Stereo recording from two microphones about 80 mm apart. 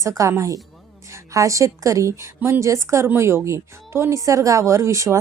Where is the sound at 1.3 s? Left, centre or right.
Right.